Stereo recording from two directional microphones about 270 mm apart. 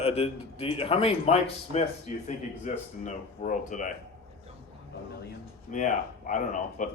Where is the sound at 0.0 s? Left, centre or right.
Left.